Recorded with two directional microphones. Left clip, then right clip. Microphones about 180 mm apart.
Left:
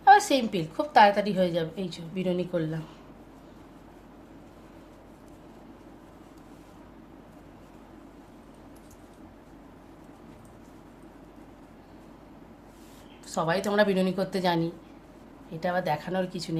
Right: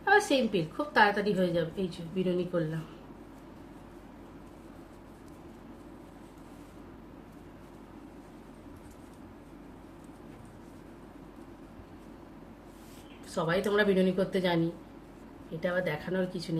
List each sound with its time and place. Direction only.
0.0 s a woman's voice: 70° left (ahead or behind)
13.3 s a woman's voice: 70° left (ahead or behind)
15.6 s a woman's voice: 70° left (ahead or behind)